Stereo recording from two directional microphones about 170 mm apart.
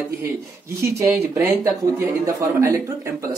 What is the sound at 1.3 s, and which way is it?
Speech, 20° right (ahead or behind).